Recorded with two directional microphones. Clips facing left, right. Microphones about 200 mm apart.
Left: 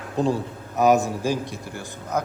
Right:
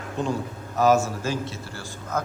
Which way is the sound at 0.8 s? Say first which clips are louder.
Left 1 dB; 15° left (ahead or behind).